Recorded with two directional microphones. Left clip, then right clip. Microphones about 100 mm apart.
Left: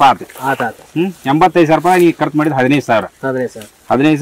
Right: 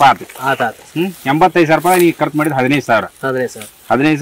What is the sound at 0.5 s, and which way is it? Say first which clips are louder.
Speech: right 1 dB; 25° right (ahead or behind).